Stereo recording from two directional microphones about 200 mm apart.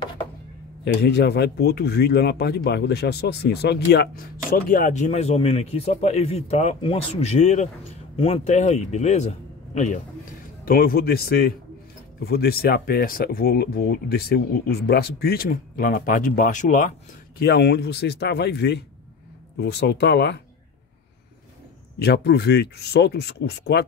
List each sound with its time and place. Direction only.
1.0 s speech: 55° left (ahead or behind); by 9.3 s 35° left (ahead or behind)
10.6 s speech: 45° left (ahead or behind)
17.4 s speech: 50° left (ahead or behind)
21.9 s speech: 55° left (ahead or behind)